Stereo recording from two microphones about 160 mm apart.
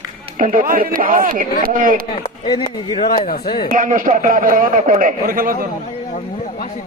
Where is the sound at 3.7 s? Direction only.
60° right (ahead or behind).